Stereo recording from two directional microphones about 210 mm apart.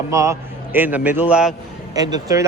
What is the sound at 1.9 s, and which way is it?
Speech, 20° right (ahead or behind).